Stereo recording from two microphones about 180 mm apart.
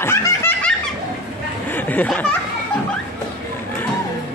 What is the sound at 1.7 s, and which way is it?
Speech, 10° left (ahead or behind).